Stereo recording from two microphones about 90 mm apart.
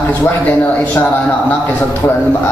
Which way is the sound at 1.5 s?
20° left (ahead or behind).